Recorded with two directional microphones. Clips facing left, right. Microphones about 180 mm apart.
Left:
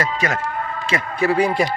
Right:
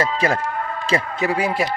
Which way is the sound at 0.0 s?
30° right (ahead or behind).